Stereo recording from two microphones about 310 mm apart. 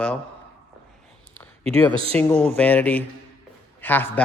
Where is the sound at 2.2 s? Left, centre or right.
Centre.